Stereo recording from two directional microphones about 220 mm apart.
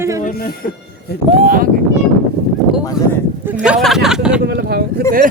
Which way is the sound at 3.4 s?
5° right (ahead or behind).